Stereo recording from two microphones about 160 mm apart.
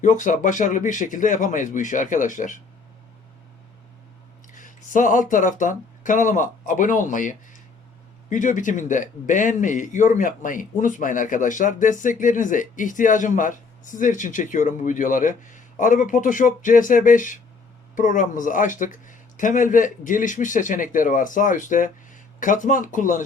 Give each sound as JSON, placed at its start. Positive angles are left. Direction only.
{"t": 0.0, "sound": "a man's voice", "side_deg": 50}
{"t": 4.5, "sound": "a man's voice", "side_deg": 55}